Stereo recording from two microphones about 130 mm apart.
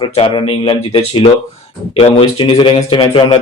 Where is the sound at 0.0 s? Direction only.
45° left (ahead or behind).